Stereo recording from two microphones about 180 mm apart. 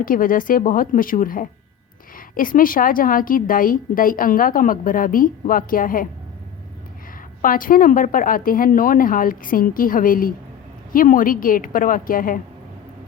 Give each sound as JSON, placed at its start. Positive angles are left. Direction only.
{"t": 0.0, "sound": "a woman's voice", "side_deg": 50}
{"t": 7.4, "sound": "a woman's voice", "side_deg": 50}